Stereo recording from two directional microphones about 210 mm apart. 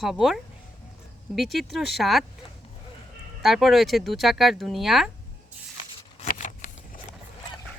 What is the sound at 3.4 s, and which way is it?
Speech, centre (ahead or behind).